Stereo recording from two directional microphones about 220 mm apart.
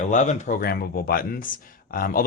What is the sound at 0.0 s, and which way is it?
Speech, 35° left (ahead or behind).